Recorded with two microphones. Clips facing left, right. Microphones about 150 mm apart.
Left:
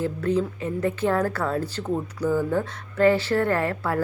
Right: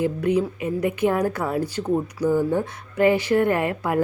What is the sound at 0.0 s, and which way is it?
Speech, 15° right (ahead or behind).